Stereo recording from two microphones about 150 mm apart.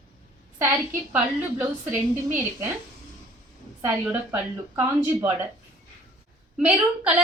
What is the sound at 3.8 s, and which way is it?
A woman's voice, 15° right (ahead or behind).